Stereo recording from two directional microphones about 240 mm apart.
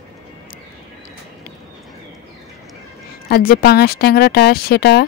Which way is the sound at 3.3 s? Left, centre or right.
Left.